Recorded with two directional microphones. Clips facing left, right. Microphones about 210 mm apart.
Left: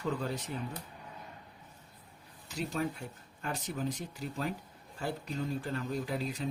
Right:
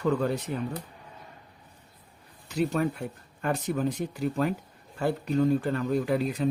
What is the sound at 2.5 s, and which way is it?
Speech, 60° right (ahead or behind).